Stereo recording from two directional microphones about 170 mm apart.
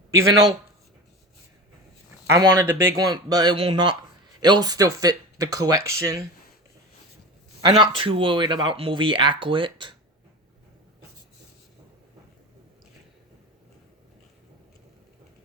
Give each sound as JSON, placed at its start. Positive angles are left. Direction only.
{"t": 0.1, "sound": "speech", "side_deg": -20}
{"t": 2.2, "sound": "speech", "side_deg": -15}
{"t": 7.6, "sound": "speech", "side_deg": -30}